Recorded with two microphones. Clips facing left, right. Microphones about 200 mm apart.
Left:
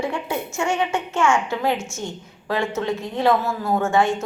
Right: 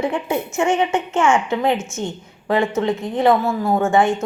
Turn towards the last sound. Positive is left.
turn(degrees=-15)  # may be behind; listen again after turning